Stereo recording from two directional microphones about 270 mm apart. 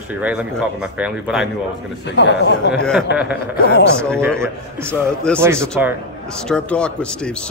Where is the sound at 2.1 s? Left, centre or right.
Left.